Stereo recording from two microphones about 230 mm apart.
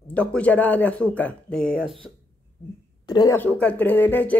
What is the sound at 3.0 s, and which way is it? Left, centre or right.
Speech, centre.